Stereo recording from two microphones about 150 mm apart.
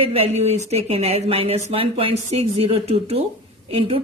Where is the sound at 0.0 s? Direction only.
40° right (ahead or behind).